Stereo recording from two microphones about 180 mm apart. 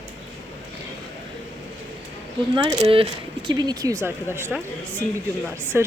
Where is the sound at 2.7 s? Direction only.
25° right (ahead or behind).